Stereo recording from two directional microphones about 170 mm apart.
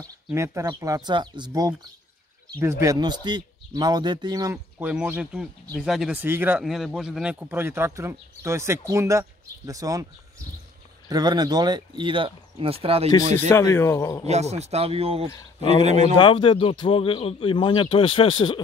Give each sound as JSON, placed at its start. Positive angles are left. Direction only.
{"t": 0.0, "sound": "speech", "side_deg": -20}
{"t": 6.6, "sound": "speech", "side_deg": 0}
{"t": 11.1, "sound": "speech", "side_deg": -25}
{"t": 13.5, "sound": "speech", "side_deg": 15}
{"t": 14.2, "sound": "speech", "side_deg": -40}
{"t": 16.2, "sound": "speech", "side_deg": 30}